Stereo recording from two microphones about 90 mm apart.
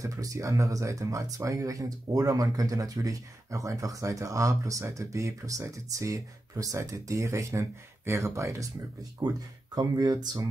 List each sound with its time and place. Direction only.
0.0 s speech: 40° right (ahead or behind)
9.2 s speech: 55° right (ahead or behind)